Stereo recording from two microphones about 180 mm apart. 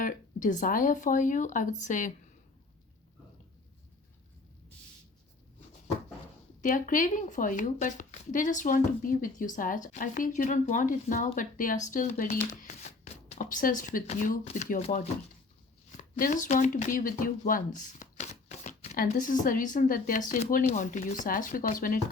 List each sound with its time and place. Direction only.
0.0 s speech: 45° left (ahead or behind)
6.6 s speech: 45° left (ahead or behind)